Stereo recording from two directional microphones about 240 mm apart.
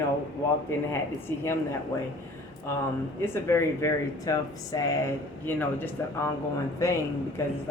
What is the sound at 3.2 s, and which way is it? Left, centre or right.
Speech, centre.